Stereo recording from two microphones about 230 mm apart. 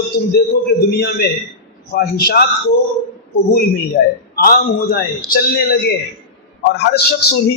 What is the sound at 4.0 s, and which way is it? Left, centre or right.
A man's voice, left.